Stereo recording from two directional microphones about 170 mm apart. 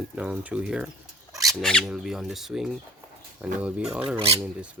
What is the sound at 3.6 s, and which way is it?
Speech, 10° right (ahead or behind).